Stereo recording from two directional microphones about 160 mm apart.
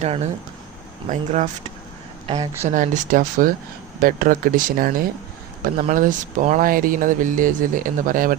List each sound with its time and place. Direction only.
0.0 s speech: 45° right (ahead or behind)
2.6 s speech: 50° right (ahead or behind)